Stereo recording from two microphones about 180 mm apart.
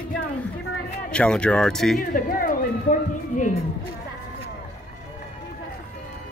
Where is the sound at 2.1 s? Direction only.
50° left (ahead or behind).